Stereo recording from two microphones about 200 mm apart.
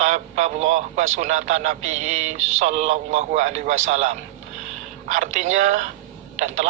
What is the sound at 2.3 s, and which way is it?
Speech, 80° right.